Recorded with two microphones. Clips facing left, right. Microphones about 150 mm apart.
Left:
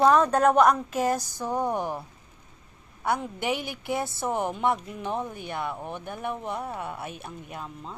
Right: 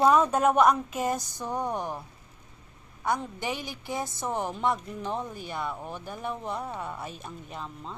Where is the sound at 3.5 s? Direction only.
65° left (ahead or behind).